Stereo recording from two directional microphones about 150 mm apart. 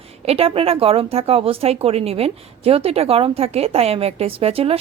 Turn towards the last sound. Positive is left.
turn(degrees=-40)  # may be behind; listen again after turning